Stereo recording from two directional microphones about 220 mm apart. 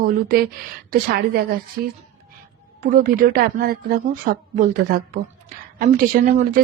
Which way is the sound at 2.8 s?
40° right (ahead or behind).